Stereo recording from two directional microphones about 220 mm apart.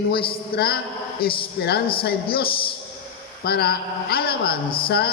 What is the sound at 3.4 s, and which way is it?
A man's voice, 45° left (ahead or behind).